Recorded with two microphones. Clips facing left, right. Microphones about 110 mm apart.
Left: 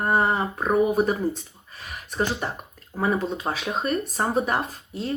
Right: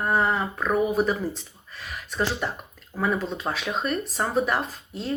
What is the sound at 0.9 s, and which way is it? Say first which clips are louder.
Speech: left 2 dB; 55° left (ahead or behind).